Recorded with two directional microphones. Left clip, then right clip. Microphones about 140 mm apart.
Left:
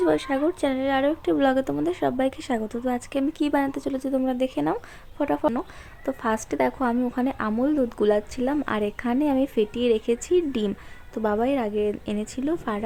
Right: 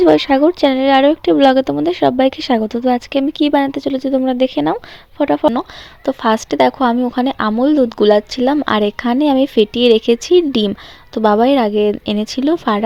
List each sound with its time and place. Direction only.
0.0 s speech: 40° right (ahead or behind)